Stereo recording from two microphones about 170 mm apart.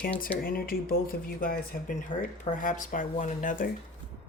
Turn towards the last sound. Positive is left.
turn(degrees=50)  # may be behind; listen again after turning